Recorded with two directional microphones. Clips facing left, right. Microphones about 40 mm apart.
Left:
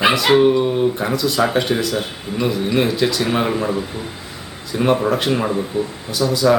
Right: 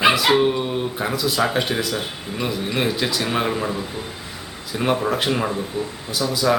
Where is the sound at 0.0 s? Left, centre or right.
Centre.